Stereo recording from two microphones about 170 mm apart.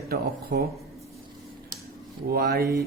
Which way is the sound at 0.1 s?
65° right (ahead or behind).